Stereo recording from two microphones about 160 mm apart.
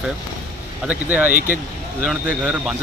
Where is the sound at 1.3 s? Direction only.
55° right (ahead or behind).